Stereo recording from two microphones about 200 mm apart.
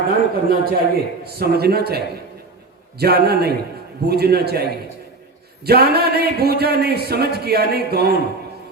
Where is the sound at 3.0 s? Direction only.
50° right (ahead or behind).